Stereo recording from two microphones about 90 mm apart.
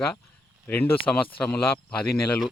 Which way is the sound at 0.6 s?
25° left (ahead or behind).